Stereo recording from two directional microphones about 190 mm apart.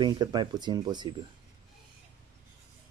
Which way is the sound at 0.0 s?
20° right (ahead or behind).